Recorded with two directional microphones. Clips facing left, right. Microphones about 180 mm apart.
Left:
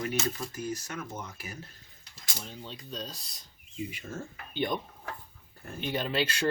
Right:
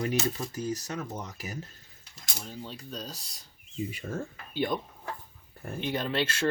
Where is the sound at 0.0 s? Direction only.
35° right (ahead or behind).